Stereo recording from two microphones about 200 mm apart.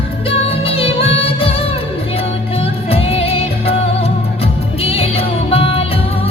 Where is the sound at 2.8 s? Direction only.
30° left (ahead or behind).